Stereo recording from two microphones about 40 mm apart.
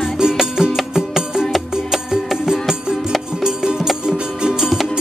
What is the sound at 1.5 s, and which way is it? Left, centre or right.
Music, centre.